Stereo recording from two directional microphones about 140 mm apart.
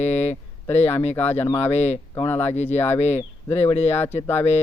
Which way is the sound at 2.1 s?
15° left (ahead or behind).